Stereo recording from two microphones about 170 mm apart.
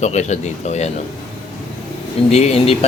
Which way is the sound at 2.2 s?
40° left (ahead or behind).